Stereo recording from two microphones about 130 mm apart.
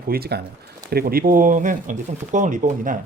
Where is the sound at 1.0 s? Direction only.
90° right.